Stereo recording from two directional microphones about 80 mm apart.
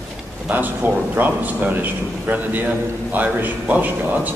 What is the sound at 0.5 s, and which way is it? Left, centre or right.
A man's voice, right.